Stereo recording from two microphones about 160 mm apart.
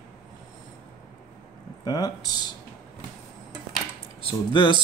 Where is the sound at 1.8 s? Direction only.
25° left (ahead or behind).